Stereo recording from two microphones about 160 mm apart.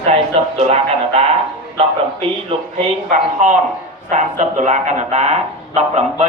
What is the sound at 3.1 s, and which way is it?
Speech, 50° right (ahead or behind).